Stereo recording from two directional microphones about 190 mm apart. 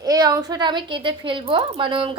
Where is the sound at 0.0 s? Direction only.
20° right (ahead or behind).